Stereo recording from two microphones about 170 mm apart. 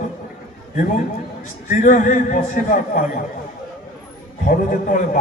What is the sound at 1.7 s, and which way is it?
A man's voice, 50° left (ahead or behind).